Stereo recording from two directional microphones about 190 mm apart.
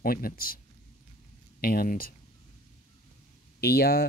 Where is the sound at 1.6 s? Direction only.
50° left (ahead or behind).